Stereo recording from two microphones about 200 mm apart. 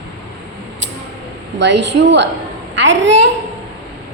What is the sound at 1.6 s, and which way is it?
A woman's voice, 60° right (ahead or behind).